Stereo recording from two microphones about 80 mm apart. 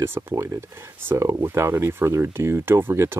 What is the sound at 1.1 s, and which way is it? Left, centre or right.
Speech, right.